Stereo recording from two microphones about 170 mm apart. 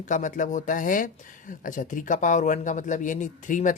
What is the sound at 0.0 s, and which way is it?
Speech, 50° left (ahead or behind).